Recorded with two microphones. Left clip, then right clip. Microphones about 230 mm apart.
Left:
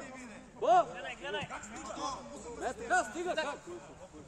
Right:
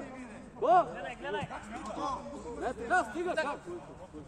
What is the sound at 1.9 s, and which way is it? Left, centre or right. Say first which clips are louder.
Speech: right 3 dB; left.